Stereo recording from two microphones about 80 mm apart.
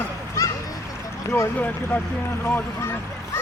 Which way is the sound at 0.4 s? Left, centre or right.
Left.